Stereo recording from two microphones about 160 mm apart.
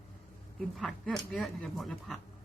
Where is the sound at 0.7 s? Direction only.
5° left (ahead or behind).